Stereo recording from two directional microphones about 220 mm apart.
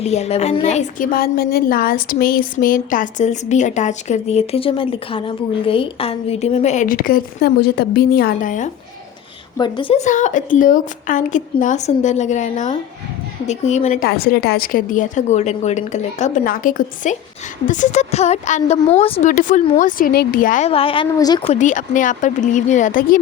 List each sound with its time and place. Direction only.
0.0 s a woman's voice: 30° left (ahead or behind)
9.6 s a woman's voice: 20° left (ahead or behind)
14.1 s a woman's voice: 45° left (ahead or behind)